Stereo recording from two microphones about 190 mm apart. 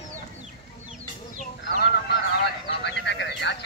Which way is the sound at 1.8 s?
60° left (ahead or behind).